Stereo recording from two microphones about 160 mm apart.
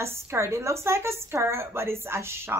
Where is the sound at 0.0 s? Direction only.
15° right (ahead or behind).